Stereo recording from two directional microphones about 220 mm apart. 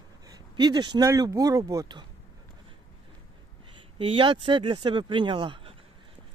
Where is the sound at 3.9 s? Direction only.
20° right (ahead or behind).